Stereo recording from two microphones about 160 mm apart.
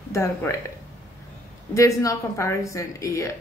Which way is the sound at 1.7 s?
20° left (ahead or behind).